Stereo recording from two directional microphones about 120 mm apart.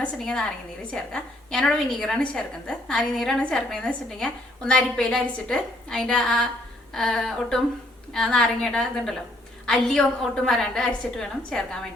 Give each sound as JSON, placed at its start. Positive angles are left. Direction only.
{"t": 0.0, "sound": "a woman's voice", "side_deg": 5}